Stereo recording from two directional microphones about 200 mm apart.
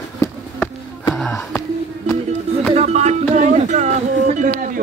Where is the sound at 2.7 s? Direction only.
35° right (ahead or behind).